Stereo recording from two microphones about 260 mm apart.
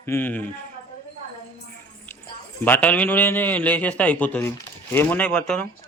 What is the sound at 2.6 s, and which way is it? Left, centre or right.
A man's voice, centre.